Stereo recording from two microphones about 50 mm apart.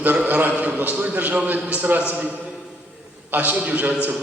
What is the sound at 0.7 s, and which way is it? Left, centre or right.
A man's voice, right.